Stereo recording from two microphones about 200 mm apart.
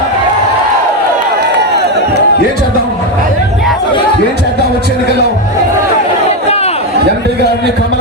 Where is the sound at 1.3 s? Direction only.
55° right (ahead or behind).